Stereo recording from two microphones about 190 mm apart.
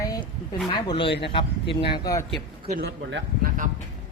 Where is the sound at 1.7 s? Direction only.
60° left (ahead or behind).